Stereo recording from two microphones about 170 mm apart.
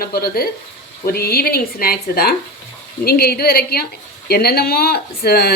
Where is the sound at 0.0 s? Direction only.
65° left (ahead or behind).